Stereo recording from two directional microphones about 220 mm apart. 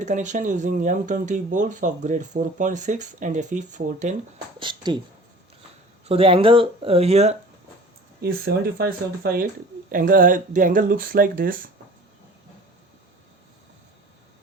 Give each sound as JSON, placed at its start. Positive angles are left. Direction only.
{"t": 0.0, "sound": "speech", "side_deg": -35}
{"t": 4.6, "sound": "speech", "side_deg": -20}
{"t": 6.1, "sound": "speech", "side_deg": -25}
{"t": 8.2, "sound": "speech", "side_deg": -45}